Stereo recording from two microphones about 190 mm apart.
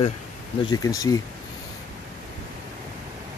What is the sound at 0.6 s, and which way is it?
Speech, 20° left (ahead or behind).